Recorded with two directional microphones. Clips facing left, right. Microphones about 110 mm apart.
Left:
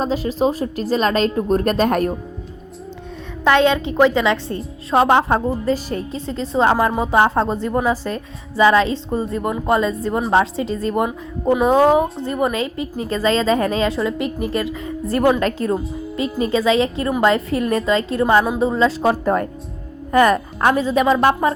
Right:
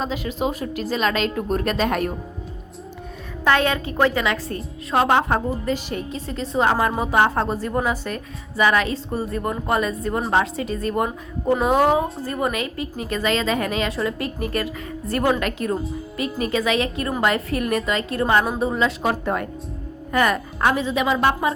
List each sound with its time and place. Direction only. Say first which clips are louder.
0.0 s speech: left 6 dB; 35° left (ahead or behind)
3.4 s a woman's voice: left 5 dB; 20° left (ahead or behind); by 21.5 s 40° left (ahead or behind)